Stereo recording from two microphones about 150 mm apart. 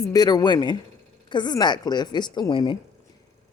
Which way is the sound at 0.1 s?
25° left (ahead or behind).